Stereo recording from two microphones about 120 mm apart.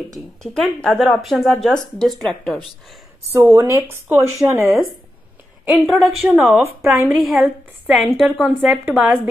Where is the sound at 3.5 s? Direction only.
25° right (ahead or behind).